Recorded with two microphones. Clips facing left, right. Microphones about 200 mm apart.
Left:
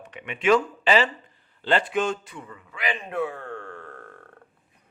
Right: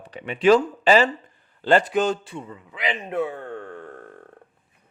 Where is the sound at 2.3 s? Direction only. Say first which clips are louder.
Right 4 dB; 20° right (ahead or behind).